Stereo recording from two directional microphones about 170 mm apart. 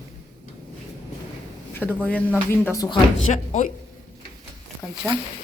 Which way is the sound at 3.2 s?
45° left (ahead or behind).